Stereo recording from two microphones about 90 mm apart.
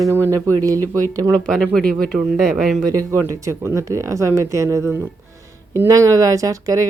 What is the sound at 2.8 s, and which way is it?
Speech, 40° right (ahead or behind).